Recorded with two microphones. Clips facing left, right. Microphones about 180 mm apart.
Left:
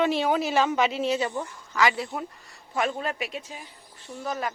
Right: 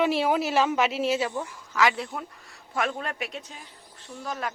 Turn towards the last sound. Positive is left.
turn(degrees=0)  # may be behind; listen again after turning